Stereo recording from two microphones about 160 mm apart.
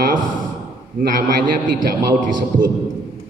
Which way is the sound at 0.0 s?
55° right (ahead or behind).